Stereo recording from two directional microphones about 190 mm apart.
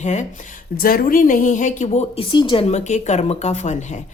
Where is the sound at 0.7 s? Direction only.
50° left (ahead or behind).